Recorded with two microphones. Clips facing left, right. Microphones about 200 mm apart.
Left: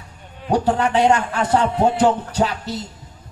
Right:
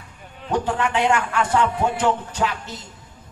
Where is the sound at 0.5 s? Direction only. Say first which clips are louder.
Left 4 dB; 35° left (ahead or behind).